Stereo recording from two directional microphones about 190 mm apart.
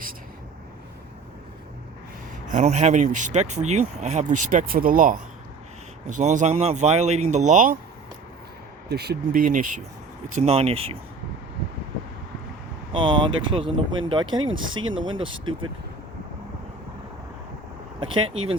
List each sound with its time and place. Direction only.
2.5 s speech: 40° right (ahead or behind)
8.9 s speech: 60° right (ahead or behind)
10.3 s speech: 35° right (ahead or behind)
12.9 s speech: 25° right (ahead or behind)